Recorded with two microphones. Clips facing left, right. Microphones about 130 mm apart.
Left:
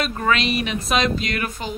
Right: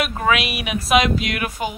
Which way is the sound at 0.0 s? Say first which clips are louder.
Right 1 dB; 10° right (ahead or behind).